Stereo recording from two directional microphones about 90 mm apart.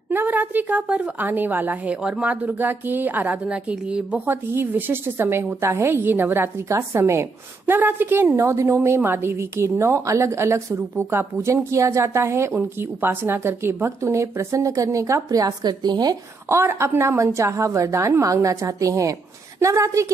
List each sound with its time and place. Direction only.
0.1 s a woman's voice: 20° right (ahead or behind)
4.3 s a woman's voice: 20° right (ahead or behind)
15.4 s a woman's voice: 50° right (ahead or behind)
16.4 s a woman's voice: 30° right (ahead or behind)